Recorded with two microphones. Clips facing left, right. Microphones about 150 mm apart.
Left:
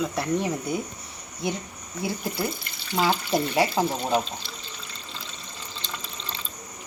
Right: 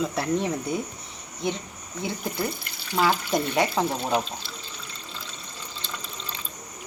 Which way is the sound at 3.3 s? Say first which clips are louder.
Left 1 dB; 5° left (ahead or behind).